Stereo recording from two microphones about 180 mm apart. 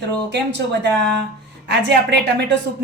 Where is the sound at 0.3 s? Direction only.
70° right (ahead or behind).